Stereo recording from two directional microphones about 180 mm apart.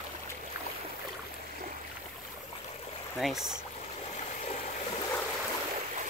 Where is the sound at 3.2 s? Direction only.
Centre (ahead or behind).